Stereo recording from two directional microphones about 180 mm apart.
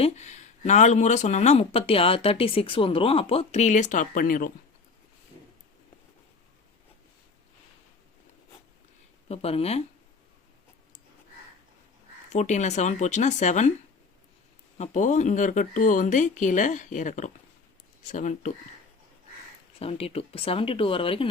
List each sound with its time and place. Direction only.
0.0 s speech: 40° left (ahead or behind)
9.3 s speech: 35° left (ahead or behind)
12.3 s speech: 40° left (ahead or behind)
14.8 s speech: 45° left (ahead or behind)
19.8 s speech: 35° left (ahead or behind)